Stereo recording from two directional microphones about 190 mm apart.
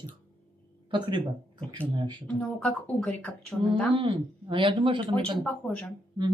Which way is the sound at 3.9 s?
25° right (ahead or behind).